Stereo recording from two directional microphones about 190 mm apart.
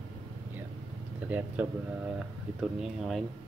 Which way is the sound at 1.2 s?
10° right (ahead or behind).